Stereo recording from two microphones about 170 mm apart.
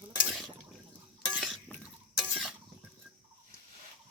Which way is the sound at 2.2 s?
5° right (ahead or behind).